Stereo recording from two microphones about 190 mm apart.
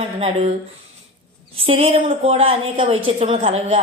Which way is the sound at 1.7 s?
30° right (ahead or behind).